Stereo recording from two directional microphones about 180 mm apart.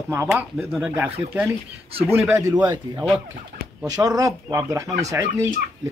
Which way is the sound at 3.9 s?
20° right (ahead or behind).